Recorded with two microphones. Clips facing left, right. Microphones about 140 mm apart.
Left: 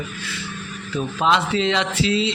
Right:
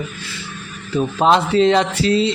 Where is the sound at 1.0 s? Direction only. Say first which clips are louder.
Right 5 dB; 40° right (ahead or behind).